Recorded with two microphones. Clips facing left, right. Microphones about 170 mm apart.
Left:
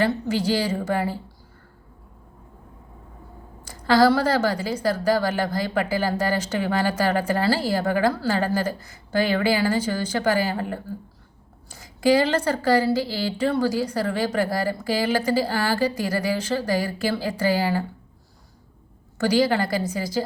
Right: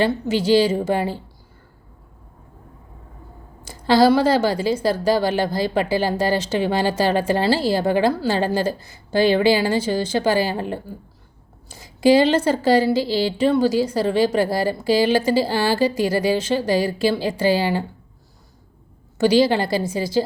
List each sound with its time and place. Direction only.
0.0 s a woman's voice: 25° right (ahead or behind)
3.6 s a woman's voice: 25° right (ahead or behind)
19.2 s a woman's voice: 25° right (ahead or behind)